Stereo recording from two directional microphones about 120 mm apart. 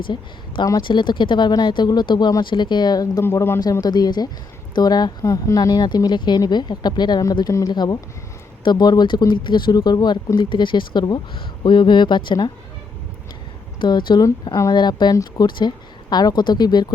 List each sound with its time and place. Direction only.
0.1 s speech: 35° left (ahead or behind)
3.2 s speech: 20° left (ahead or behind)
3.6 s speech: 35° left (ahead or behind)
13.8 s speech: 40° left (ahead or behind)